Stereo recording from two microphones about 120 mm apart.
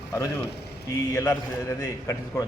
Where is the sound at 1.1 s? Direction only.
25° left (ahead or behind).